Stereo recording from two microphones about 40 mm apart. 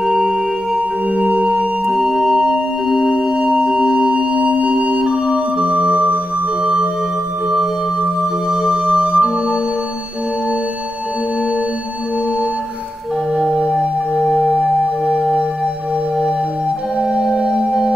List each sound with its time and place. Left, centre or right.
0.0 s singing bowl: centre
0.7 s singing bowl: right
1.9 s music: centre
3.2 s singing bowl: right
4.1 s music: right
8.2 s music: centre
13.6 s music: right
17.0 s organ: centre
17.4 s singing bowl: right